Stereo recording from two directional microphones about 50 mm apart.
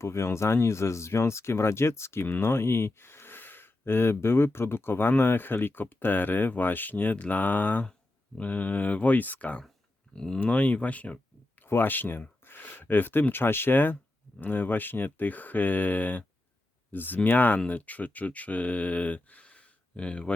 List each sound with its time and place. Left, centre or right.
0.0 s speech: left
10.2 s speech: centre
10.5 s speech: left
11.6 s speech: left